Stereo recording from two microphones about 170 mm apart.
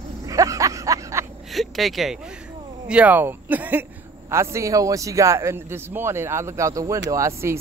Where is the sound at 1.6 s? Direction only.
Centre (ahead or behind).